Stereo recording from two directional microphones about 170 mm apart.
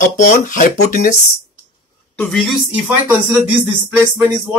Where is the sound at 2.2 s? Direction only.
Centre (ahead or behind).